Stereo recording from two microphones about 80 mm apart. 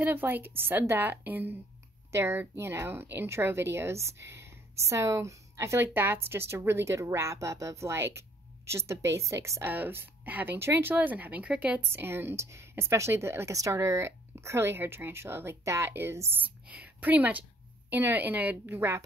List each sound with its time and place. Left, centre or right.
0.0 s speech: right
9.7 s a woman's voice: right
11.8 s speech: right
16.3 s a woman's voice: right
18.7 s speech: right